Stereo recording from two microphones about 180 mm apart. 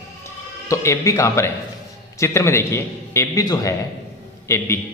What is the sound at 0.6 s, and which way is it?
A man's voice, 15° left (ahead or behind).